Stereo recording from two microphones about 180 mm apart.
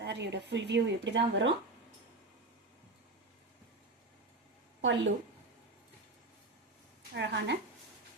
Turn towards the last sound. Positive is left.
turn(degrees=-75)  # may be behind; listen again after turning